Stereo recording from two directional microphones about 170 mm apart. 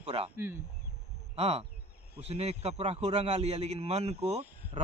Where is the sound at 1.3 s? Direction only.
35° right (ahead or behind).